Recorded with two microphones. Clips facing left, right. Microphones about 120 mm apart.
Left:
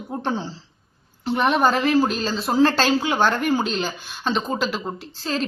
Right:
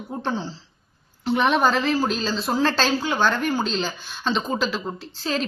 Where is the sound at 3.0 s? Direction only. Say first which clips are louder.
Left 2 dB; 20° left (ahead or behind).